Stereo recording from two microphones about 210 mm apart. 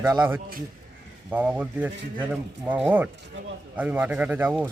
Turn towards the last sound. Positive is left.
turn(degrees=-10)  # may be behind; listen again after turning